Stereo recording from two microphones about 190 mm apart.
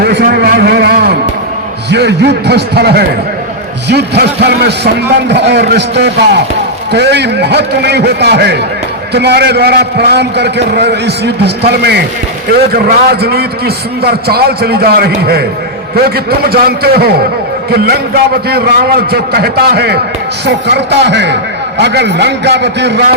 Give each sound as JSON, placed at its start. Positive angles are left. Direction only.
{"t": 0.0, "sound": "a man's voice", "side_deg": -55}